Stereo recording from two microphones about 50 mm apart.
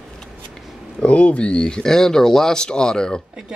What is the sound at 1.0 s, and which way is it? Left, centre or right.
Speech, left.